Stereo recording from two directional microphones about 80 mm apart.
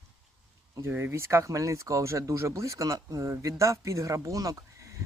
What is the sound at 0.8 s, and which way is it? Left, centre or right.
Speech, right.